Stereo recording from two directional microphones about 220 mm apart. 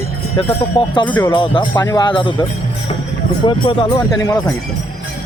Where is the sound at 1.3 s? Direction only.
20° left (ahead or behind).